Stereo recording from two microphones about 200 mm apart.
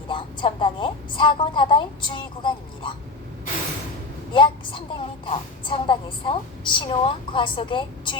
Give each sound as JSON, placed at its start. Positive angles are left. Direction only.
{"t": 0.1, "sound": "speech", "side_deg": 25}
{"t": 4.3, "sound": "speech", "side_deg": 25}